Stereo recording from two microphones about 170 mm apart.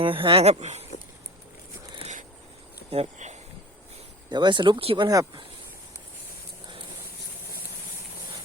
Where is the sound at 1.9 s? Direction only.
40° right (ahead or behind).